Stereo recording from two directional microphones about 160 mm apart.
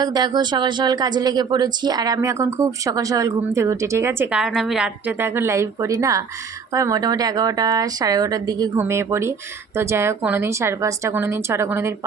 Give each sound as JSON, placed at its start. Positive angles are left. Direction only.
{"t": 0.0, "sound": "a woman's voice", "side_deg": -25}